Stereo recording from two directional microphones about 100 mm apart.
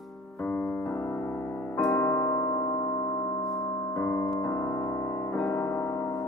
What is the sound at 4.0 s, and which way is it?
Piano, 25° left (ahead or behind).